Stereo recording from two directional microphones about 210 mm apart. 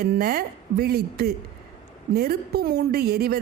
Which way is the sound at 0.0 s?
45° right (ahead or behind).